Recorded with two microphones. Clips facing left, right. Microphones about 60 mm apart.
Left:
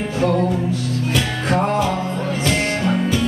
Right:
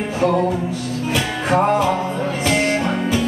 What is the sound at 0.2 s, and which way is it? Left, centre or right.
Music, centre.